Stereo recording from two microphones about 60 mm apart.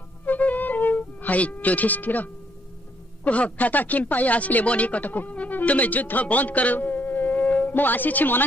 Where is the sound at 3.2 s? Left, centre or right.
Left.